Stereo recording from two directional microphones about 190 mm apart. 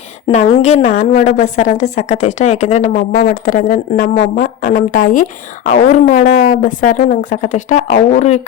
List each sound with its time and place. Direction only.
0.6 s a woman's voice: 40° left (ahead or behind)